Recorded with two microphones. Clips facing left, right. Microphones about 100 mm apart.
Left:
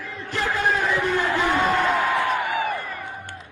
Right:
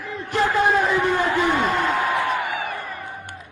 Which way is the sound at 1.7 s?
Centre (ahead or behind).